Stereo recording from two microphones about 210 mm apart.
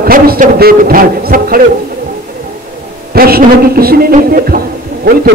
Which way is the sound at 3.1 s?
45° right (ahead or behind).